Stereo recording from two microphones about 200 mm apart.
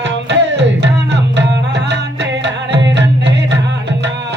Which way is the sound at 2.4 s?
60° right (ahead or behind).